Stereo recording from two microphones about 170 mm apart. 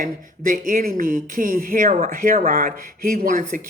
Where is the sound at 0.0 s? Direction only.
55° right (ahead or behind).